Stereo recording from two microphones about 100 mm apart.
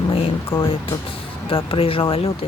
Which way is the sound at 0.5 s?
70° left (ahead or behind).